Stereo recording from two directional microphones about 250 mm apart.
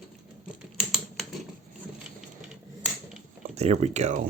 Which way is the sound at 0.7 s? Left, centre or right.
Centre.